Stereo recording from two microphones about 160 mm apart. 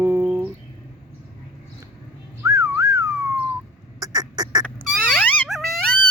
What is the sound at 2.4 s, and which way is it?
Whistling, 20° right (ahead or behind).